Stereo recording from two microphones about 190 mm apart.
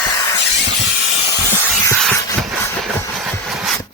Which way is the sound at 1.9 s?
Centre (ahead or behind).